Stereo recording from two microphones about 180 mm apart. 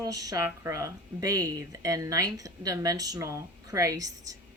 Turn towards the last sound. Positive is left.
turn(degrees=-20)  # may be behind; listen again after turning